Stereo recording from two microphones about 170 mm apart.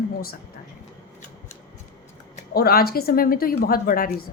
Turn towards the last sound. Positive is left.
turn(degrees=55)  # may be behind; listen again after turning